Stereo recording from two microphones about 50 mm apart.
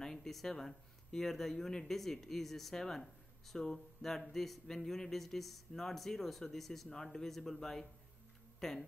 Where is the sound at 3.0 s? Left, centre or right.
Centre.